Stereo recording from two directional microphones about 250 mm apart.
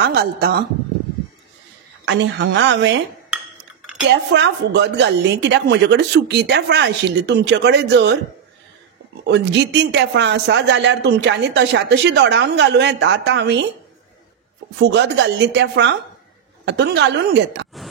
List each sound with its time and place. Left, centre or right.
0.0 s speech: right
2.0 s speech: right
4.3 s speech: right
9.3 s speech: right
14.8 s speech: right